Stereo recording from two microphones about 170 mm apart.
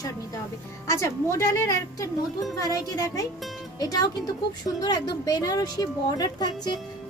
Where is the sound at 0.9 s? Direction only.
15° left (ahead or behind).